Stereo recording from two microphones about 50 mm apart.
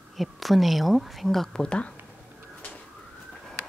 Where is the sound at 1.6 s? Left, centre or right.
Left.